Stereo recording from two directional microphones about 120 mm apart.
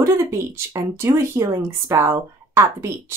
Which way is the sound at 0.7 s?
20° right (ahead or behind).